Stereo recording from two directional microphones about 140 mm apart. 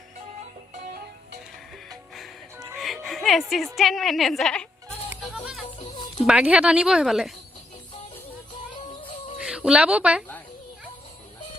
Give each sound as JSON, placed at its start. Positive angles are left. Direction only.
{"t": 1.9, "sound": "music", "side_deg": 0}
{"t": 3.8, "sound": "speech", "side_deg": 0}
{"t": 5.9, "sound": "a sound", "side_deg": 35}
{"t": 6.2, "sound": "speech", "side_deg": -5}
{"t": 8.7, "sound": "music", "side_deg": 40}
{"t": 9.4, "sound": "speech", "side_deg": -5}